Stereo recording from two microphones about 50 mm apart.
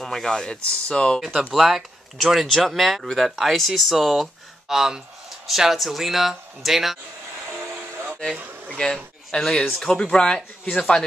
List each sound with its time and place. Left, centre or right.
0.0 s speech: centre
1.2 s speech: centre
1.5 s speech: centre
7.6 s a sound: right
8.6 s speech: centre
8.9 s a man's voice: centre